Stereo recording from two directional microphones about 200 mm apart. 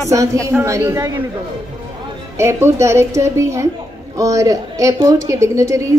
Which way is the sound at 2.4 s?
15° right (ahead or behind).